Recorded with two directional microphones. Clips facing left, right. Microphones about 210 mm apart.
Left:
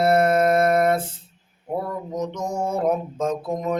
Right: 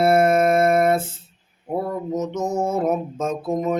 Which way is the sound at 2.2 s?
5° right (ahead or behind).